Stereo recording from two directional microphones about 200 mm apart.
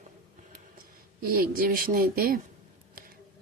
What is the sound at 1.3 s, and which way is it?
A woman's voice, 45° right (ahead or behind).